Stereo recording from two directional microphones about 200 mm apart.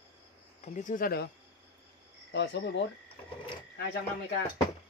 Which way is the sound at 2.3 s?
60° left (ahead or behind).